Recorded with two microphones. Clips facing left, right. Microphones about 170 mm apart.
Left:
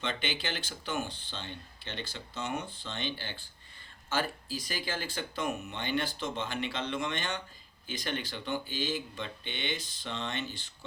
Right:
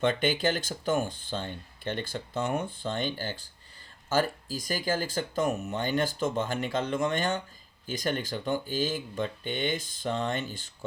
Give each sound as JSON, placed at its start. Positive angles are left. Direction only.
{"t": 0.0, "sound": "speech", "side_deg": -50}